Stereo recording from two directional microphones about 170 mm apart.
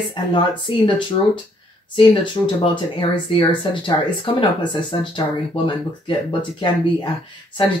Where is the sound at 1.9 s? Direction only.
30° left (ahead or behind).